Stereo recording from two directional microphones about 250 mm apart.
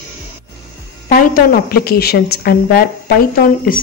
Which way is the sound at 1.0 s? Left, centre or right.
Left.